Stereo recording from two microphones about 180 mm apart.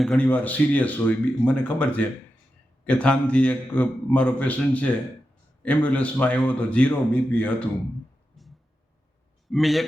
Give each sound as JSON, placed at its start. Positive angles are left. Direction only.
{"t": 0.0, "sound": "speech", "side_deg": 5}
{"t": 9.5, "sound": "a man's voice", "side_deg": 0}